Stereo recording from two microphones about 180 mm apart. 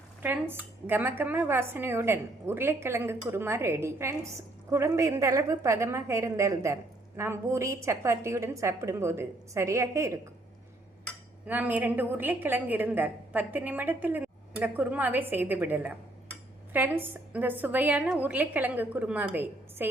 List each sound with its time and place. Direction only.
0.2 s speech: 10° right (ahead or behind)
11.4 s speech: 10° right (ahead or behind)